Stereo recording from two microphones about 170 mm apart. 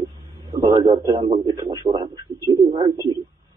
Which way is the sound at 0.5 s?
25° right (ahead or behind).